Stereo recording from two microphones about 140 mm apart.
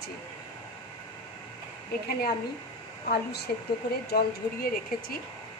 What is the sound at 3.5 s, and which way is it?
A woman's voice, 90° left.